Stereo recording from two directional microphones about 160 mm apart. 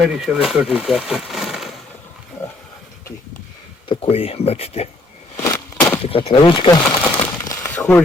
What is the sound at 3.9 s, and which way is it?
Speech, 35° left (ahead or behind).